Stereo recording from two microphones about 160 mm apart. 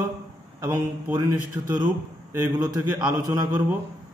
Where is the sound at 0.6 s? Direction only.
15° right (ahead or behind).